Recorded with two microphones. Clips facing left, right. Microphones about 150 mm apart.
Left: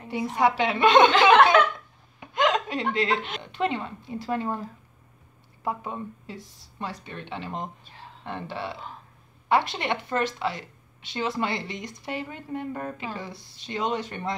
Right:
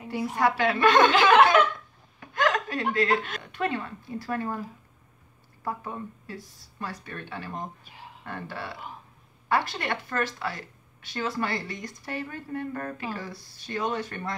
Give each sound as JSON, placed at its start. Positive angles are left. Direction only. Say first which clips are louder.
{"t": 0.4, "sound": "a woman's voice", "louder": "left 1 dB", "side_deg": 20}
{"t": 2.1, "sound": "a woman's voice", "louder": "left 2 dB", "side_deg": 20}
{"t": 5.6, "sound": "a woman's voice", "louder": "left 2 dB", "side_deg": 20}